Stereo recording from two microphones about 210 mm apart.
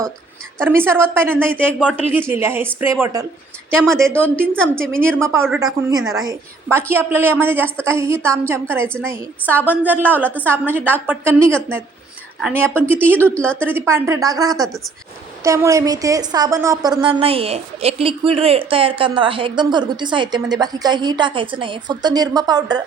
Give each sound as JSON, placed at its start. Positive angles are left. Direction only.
{"t": 0.6, "sound": "a woman's voice", "side_deg": -10}
{"t": 3.7, "sound": "speech", "side_deg": 0}
{"t": 5.1, "sound": "a woman's voice", "side_deg": -10}
{"t": 13.3, "sound": "speech", "side_deg": 5}
{"t": 13.6, "sound": "a woman's voice", "side_deg": -10}
{"t": 14.5, "sound": "speech", "side_deg": 0}
{"t": 15.4, "sound": "speech", "side_deg": -15}